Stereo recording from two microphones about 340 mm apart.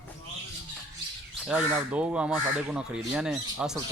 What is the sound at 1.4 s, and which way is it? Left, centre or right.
Speech, centre.